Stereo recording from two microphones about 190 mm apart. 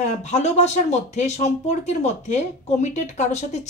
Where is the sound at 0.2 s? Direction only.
35° left (ahead or behind).